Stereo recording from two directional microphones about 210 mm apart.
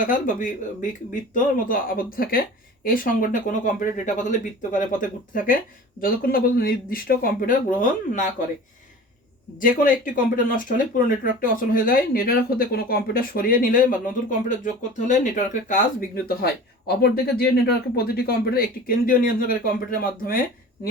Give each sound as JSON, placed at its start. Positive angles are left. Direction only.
{"t": 0.1, "sound": "speech", "side_deg": 40}
{"t": 10.3, "sound": "speech", "side_deg": 40}